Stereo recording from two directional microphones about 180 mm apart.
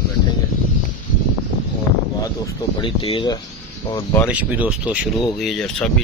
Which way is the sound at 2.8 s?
30° left (ahead or behind).